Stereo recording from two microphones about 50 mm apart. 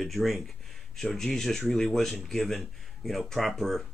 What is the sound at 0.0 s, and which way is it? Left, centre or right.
Speech, centre.